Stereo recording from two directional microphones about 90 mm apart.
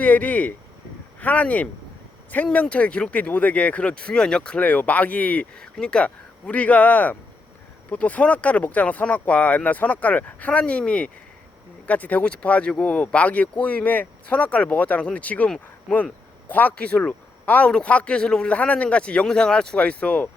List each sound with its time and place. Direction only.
0.0 s speech: 15° left (ahead or behind)